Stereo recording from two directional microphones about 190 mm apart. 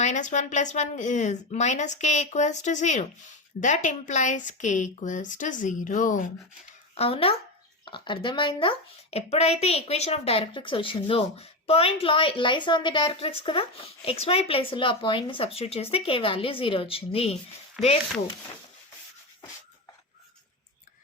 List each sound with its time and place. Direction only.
0.0 s speech: 40° left (ahead or behind)
6.9 s speech: 30° left (ahead or behind)
17.8 s speech: centre (ahead or behind)